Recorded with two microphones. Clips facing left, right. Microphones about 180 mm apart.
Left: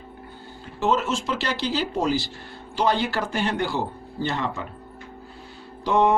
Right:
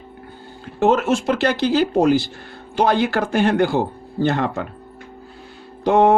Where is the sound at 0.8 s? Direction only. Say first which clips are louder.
Right 7 dB; 55° right (ahead or behind).